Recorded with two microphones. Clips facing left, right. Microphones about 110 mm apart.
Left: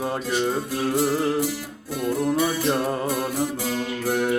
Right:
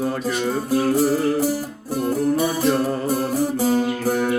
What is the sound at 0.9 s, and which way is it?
Music, 45° right (ahead or behind).